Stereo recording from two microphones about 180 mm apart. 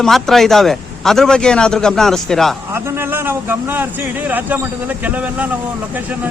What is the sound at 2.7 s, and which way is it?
A man's voice, 15° right (ahead or behind).